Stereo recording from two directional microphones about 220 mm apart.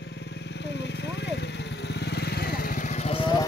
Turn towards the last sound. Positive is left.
turn(degrees=20)  # may be behind; listen again after turning